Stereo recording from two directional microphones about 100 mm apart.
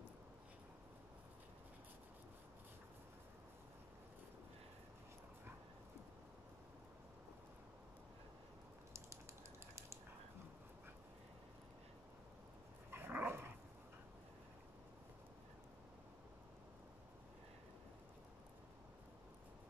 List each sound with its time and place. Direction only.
12.9 s dog: 20° right (ahead or behind)